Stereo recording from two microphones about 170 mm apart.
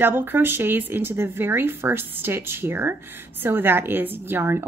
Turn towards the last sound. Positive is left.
turn(degrees=-15)  # may be behind; listen again after turning